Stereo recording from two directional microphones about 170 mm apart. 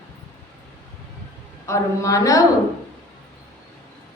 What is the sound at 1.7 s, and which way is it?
Speech, 20° left (ahead or behind).